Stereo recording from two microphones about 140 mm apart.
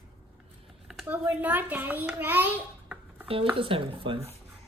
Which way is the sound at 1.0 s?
10° right (ahead or behind).